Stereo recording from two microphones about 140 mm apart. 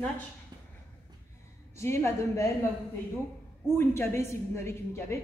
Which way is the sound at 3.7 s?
20° left (ahead or behind).